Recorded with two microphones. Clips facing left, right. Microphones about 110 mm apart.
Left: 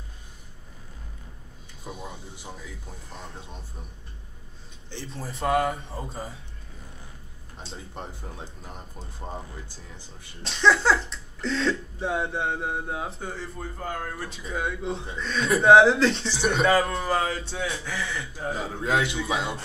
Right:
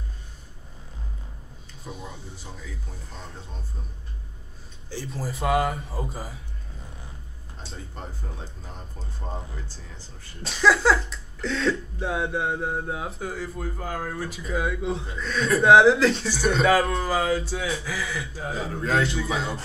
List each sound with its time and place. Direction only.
1.9 s speech: centre (ahead or behind)
2.3 s speech: 20° left (ahead or behind)
4.8 s speech: 5° right (ahead or behind)
7.7 s speech: 20° left (ahead or behind)
10.4 s speech: 5° right (ahead or behind)
18.8 s a man's voice: 20° left (ahead or behind)
19.3 s speech: 5° left (ahead or behind)